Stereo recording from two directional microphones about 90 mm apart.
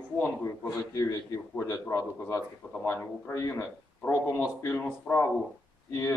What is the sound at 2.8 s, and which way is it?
A man's voice, 20° left (ahead or behind).